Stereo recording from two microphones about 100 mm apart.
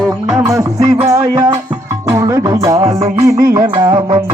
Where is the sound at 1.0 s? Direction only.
30° right (ahead or behind).